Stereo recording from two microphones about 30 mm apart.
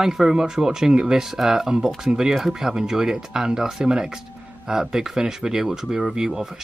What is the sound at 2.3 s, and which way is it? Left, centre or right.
Speech, centre.